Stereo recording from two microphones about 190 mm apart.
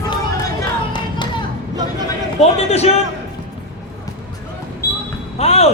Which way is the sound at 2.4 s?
35° left (ahead or behind).